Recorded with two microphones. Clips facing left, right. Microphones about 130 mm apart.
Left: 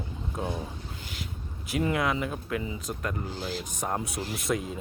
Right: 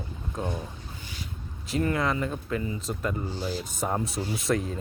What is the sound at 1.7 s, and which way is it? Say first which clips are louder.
Speech: right 1 dB; 5° left (ahead or behind).